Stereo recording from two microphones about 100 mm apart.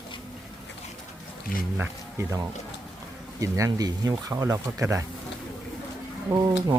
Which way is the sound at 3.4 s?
35° right (ahead or behind).